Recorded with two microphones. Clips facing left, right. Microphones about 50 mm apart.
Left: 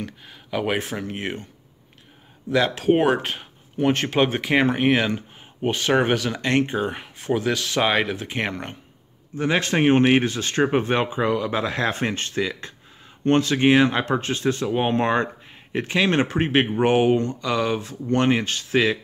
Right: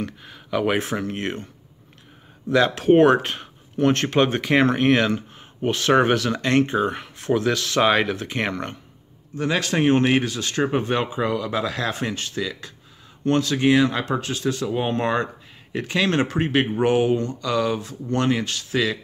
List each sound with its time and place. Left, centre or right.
0.0 s speech: centre
2.5 s speech: centre
9.4 s speech: left
17.7 s speech: left